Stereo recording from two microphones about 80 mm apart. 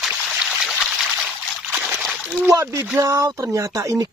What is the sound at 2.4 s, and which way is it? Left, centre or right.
Speech, right.